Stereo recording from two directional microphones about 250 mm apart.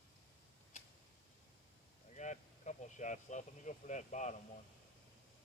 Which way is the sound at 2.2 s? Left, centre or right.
Left.